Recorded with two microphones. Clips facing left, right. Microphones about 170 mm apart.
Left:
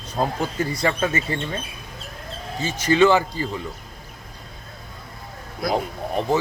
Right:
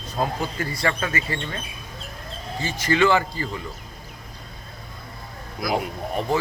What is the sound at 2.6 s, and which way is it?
Speech, 20° left (ahead or behind).